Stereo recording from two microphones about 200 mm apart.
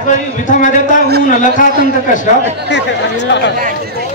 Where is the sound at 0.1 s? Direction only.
40° left (ahead or behind).